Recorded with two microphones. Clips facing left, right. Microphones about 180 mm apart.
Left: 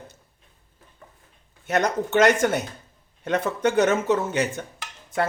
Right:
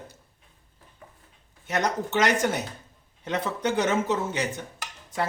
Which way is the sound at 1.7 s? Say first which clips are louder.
Left 4 dB; 55° left (ahead or behind).